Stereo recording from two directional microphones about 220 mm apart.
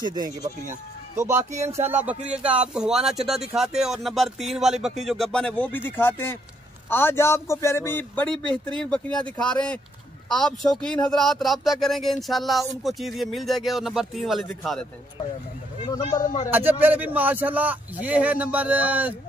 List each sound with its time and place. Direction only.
0.0 s a man's voice: 20° right (ahead or behind); by 14.9 s centre (ahead or behind)
16.0 s a man's voice: 20° left (ahead or behind)
16.4 s speech: 10° right (ahead or behind)